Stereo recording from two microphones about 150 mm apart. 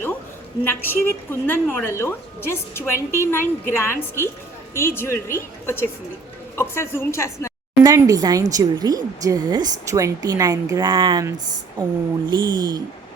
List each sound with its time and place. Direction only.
0.6 s a woman's voice: 15° left (ahead or behind)
7.9 s speech: 25° right (ahead or behind)